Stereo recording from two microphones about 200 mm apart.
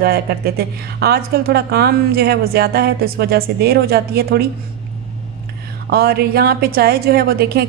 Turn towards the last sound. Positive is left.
turn(degrees=-50)  # may be behind; listen again after turning